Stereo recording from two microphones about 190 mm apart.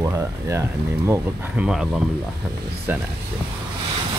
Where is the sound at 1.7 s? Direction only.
5° right (ahead or behind).